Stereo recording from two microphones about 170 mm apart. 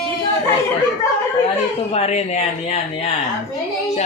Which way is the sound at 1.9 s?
40° left (ahead or behind).